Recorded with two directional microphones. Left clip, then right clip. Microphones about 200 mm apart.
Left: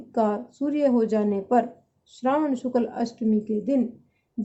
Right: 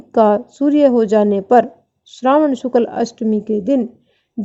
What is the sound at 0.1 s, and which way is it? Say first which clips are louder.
Speech: right 12 dB; 45° right (ahead or behind).